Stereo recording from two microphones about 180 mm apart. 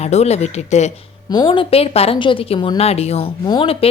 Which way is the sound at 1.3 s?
25° left (ahead or behind).